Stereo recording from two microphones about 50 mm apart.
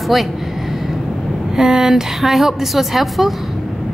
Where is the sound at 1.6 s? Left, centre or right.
Centre.